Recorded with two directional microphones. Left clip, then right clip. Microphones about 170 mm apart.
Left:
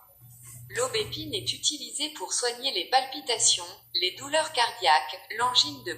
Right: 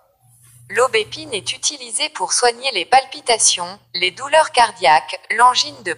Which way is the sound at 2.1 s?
45° right (ahead or behind).